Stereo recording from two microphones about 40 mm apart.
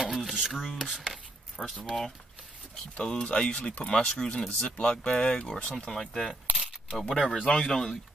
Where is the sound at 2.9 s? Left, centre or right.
Left.